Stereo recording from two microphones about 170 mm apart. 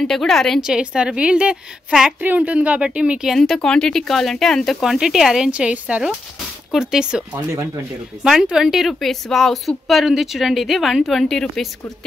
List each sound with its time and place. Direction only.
0.0 s a woman's voice: centre (ahead or behind)
7.3 s speech: 20° right (ahead or behind)
8.2 s a woman's voice: 5° right (ahead or behind)